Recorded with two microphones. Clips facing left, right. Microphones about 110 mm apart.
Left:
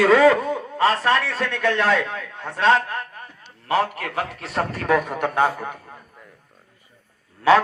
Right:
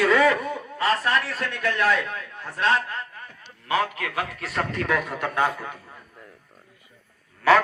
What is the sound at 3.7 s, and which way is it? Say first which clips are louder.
A man's voice: left 3 dB; 40° left (ahead or behind).